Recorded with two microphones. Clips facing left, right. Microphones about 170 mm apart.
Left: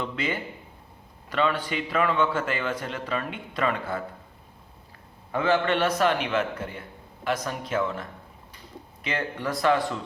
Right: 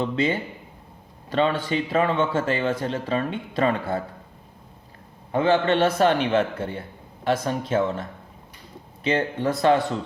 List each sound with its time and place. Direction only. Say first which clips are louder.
0.0 s a man's voice: right 6 dB; 25° right (ahead or behind)
5.3 s a man's voice: right 4 dB; 25° right (ahead or behind)
9.0 s a man's voice: right 7 dB; 25° right (ahead or behind)